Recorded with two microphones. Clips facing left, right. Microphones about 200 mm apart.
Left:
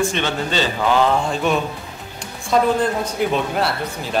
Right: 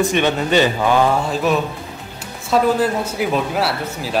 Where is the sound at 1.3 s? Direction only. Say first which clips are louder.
Right 2 dB; centre (ahead or behind).